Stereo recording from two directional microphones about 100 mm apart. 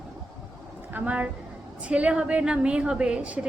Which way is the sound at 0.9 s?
15° right (ahead or behind).